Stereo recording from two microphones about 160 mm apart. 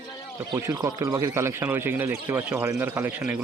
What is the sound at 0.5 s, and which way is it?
Speech, 20° right (ahead or behind).